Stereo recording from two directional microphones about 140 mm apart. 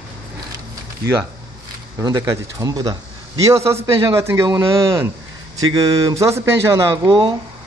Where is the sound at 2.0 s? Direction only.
25° right (ahead or behind).